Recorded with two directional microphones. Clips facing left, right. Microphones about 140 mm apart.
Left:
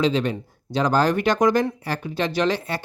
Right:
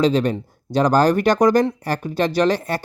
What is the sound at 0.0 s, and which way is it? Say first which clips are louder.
Speech: right 4 dB; 40° right (ahead or behind).